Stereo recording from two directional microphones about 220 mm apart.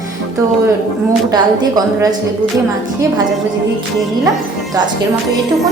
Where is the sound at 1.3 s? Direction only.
20° right (ahead or behind).